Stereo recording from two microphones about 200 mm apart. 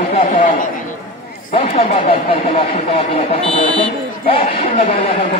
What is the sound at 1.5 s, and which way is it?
Speech, 30° left (ahead or behind).